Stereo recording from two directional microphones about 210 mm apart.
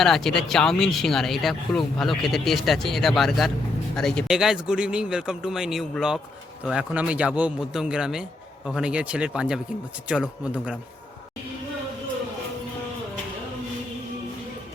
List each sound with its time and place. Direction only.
0.0 s speech: centre (ahead or behind)